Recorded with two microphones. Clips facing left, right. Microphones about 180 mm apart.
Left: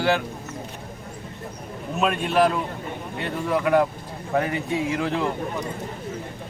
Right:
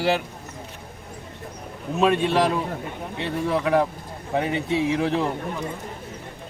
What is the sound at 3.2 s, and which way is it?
Speech, 25° right (ahead or behind).